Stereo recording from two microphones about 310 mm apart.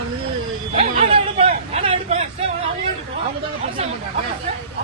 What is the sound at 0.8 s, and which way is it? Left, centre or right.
Hubbub, centre.